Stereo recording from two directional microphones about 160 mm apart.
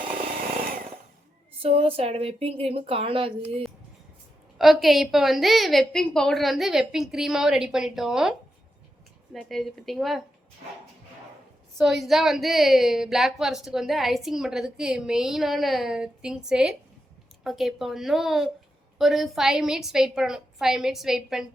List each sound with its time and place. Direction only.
1.6 s speech: 35° right (ahead or behind)
4.5 s a woman's voice: centre (ahead or behind)
11.8 s a woman's voice: centre (ahead or behind)